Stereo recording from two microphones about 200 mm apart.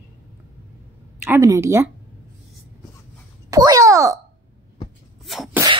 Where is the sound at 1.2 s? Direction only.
15° right (ahead or behind).